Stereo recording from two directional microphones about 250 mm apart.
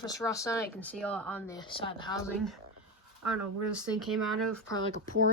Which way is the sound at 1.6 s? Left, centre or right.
Centre.